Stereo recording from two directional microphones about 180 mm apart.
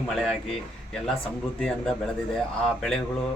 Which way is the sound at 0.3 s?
Centre (ahead or behind).